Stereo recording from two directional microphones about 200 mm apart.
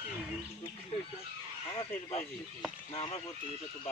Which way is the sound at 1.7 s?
30° left (ahead or behind).